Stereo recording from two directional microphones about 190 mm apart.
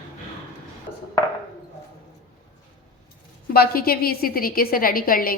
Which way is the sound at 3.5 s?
55° left (ahead or behind).